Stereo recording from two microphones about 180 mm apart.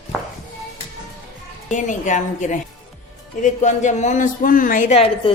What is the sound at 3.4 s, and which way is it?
Speech, 40° left (ahead or behind).